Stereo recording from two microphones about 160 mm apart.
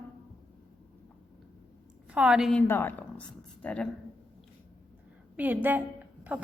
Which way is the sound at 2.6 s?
15° left (ahead or behind).